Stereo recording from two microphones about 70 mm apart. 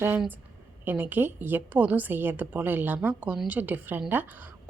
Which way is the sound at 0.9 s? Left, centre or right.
Right.